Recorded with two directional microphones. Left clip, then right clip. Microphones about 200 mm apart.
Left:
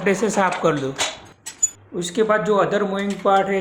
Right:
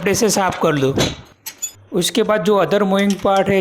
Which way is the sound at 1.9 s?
40° right (ahead or behind).